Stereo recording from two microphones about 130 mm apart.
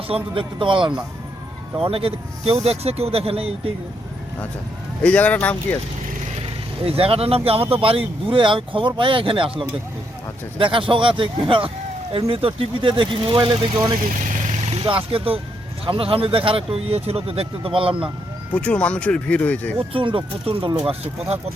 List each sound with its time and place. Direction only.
0.1 s speech: 40° right (ahead or behind)
5.0 s speech: 10° left (ahead or behind)
6.8 s speech: 45° right (ahead or behind)
10.6 s speech: 40° right (ahead or behind)
14.7 s speech: 50° right (ahead or behind)
18.5 s speech: 10° left (ahead or behind)
19.9 s speech: 45° right (ahead or behind)